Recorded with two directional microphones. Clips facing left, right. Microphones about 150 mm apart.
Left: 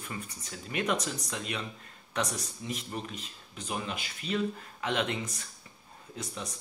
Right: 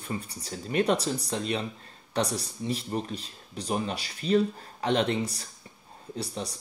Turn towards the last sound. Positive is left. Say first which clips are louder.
# right 5 dB
turn(degrees=-35)  # may be behind; listen again after turning